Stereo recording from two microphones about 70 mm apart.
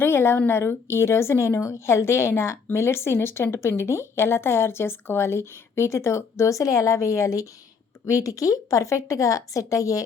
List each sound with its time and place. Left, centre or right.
0.0 s a woman's voice: left